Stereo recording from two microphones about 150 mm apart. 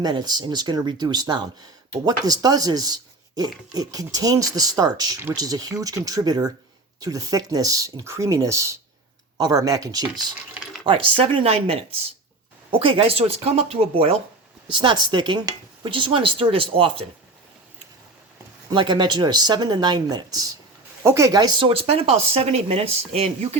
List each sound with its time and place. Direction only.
0.0 s speech: 25° right (ahead or behind)
10.8 s speech: 35° right (ahead or behind)
18.7 s speech: 30° right (ahead or behind)
21.7 s speech: 40° right (ahead or behind)